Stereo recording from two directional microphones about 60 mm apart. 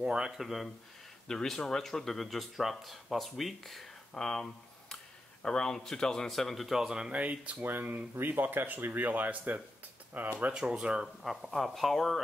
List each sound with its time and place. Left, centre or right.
0.0 s speech: centre
1.2 s speech: centre
4.1 s speech: centre
7.2 s speech: right
10.5 s speech: centre
11.2 s speech: centre